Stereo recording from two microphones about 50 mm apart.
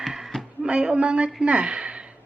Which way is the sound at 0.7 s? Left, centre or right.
Centre.